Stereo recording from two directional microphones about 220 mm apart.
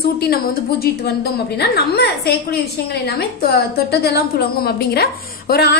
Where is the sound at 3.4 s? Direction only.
45° left (ahead or behind).